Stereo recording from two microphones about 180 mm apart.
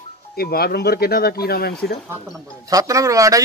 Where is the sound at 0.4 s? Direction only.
60° left (ahead or behind).